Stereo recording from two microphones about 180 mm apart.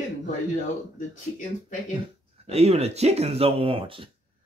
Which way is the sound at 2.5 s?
35° right (ahead or behind).